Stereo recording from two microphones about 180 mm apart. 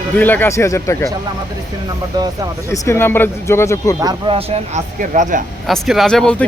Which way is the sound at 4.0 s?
25° right (ahead or behind).